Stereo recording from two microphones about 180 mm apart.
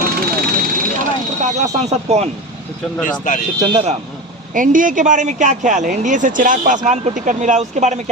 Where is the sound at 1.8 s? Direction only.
35° right (ahead or behind).